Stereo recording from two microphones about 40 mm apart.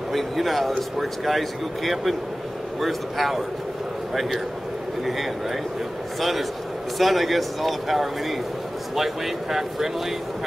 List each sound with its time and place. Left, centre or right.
0.1 s a man's voice: centre
7.0 s speech: centre